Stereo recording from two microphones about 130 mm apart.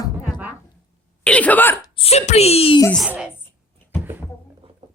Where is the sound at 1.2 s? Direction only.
10° left (ahead or behind).